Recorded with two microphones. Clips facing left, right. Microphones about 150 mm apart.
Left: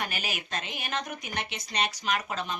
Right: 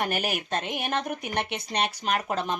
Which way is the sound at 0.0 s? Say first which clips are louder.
Right 7 dB; 55° right (ahead or behind).